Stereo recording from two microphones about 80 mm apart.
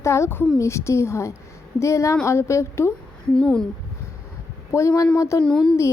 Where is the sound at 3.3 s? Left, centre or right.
Centre.